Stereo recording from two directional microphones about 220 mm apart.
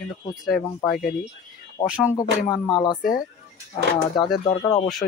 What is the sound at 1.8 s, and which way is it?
Speech, 5° right (ahead or behind).